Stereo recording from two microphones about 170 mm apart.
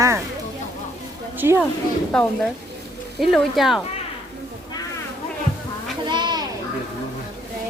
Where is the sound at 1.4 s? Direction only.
10° right (ahead or behind).